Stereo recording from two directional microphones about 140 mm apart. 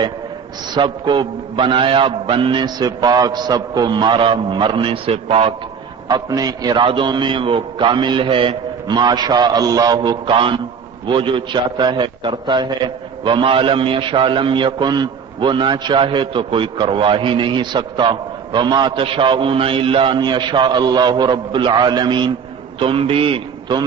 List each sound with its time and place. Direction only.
0.7 s a man's voice: 35° right (ahead or behind)
6.1 s a man's voice: 30° right (ahead or behind)